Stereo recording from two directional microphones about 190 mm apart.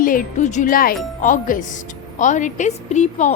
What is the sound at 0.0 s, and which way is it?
A woman's voice, 45° left (ahead or behind).